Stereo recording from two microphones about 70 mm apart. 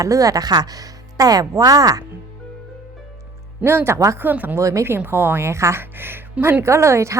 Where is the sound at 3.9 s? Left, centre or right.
Right.